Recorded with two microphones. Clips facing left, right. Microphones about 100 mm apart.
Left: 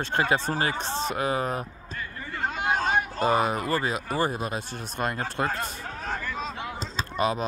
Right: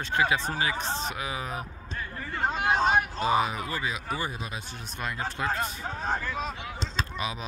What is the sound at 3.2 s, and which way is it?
Speech, 50° left (ahead or behind).